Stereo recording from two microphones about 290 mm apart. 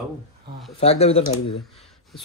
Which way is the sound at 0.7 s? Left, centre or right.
Left.